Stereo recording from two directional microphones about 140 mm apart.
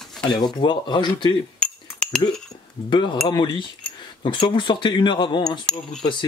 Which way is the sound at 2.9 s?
35° left (ahead or behind).